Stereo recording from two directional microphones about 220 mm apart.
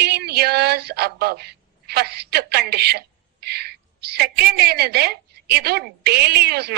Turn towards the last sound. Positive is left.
turn(degrees=-45)  # may be behind; listen again after turning